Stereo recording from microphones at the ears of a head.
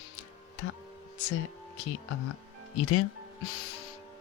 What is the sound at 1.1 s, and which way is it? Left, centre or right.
Speech, left.